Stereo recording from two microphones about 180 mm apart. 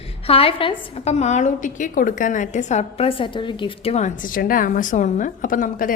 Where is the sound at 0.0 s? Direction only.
35° left (ahead or behind).